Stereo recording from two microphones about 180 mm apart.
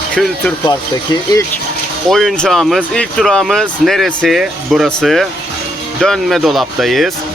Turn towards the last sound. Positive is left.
turn(degrees=0)  # may be behind; listen again after turning